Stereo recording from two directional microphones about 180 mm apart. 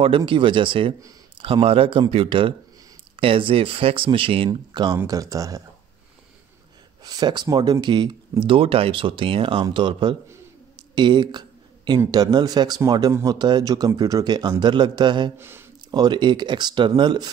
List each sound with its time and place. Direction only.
0.0 s speech: 30° right (ahead or behind)
7.0 s speech: 20° right (ahead or behind)
11.0 s a sound: 25° right (ahead or behind)
12.0 s speech: 20° right (ahead or behind)
15.3 s a sound: 15° right (ahead or behind)
16.0 s speech: 25° right (ahead or behind)